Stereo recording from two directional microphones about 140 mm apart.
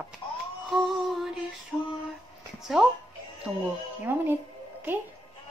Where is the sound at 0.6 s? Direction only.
Centre (ahead or behind).